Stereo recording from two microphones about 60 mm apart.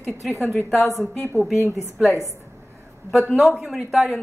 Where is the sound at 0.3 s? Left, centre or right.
Left.